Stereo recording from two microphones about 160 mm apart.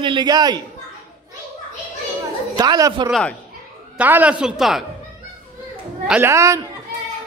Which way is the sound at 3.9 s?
10° right (ahead or behind).